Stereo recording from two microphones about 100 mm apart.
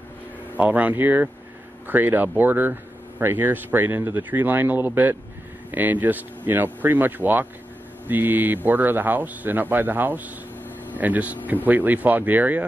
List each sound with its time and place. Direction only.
0.6 s speech: 15° right (ahead or behind)